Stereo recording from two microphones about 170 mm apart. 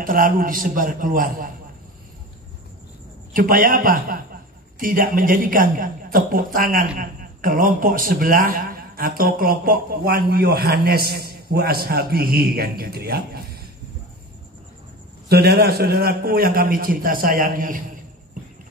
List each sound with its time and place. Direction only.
0.0 s a man's voice: 55° right (ahead or behind)
3.3 s a man's voice: 55° right (ahead or behind)
15.2 s a man's voice: 70° right (ahead or behind); by 17.8 s 55° right (ahead or behind)